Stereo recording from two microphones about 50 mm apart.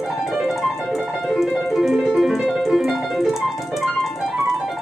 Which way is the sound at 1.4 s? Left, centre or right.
Centre.